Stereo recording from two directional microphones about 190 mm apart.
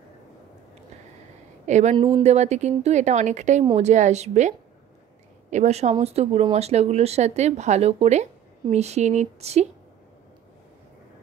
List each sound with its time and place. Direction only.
1.7 s speech: 40° right (ahead or behind)
2.0 s speech: 25° right (ahead or behind)